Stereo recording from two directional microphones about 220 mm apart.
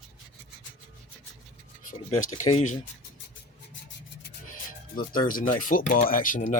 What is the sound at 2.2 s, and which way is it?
Speech, 35° left (ahead or behind).